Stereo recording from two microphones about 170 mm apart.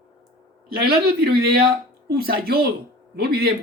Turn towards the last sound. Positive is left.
turn(degrees=-65)  # may be behind; listen again after turning